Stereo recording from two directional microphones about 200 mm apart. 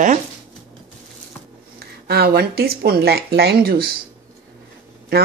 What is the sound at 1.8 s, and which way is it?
Speech, 50° right (ahead or behind).